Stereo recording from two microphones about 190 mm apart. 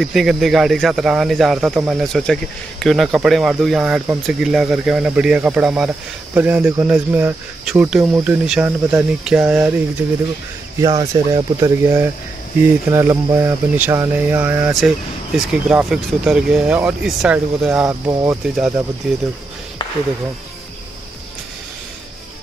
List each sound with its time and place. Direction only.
0.0 s speech: centre (ahead or behind)
10.8 s speech: 20° right (ahead or behind)